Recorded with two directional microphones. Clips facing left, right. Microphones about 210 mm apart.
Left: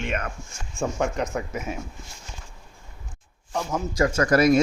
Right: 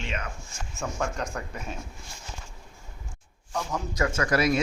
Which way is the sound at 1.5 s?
90° left.